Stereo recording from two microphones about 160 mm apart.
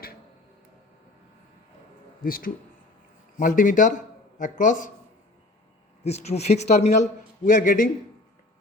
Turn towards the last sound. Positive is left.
turn(degrees=55)  # may be behind; listen again after turning